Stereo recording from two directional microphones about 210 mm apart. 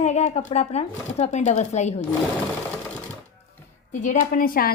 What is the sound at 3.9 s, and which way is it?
Speech, 35° left (ahead or behind).